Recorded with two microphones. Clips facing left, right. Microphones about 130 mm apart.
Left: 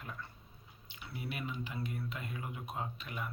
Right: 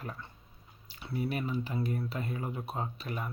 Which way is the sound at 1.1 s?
35° right (ahead or behind).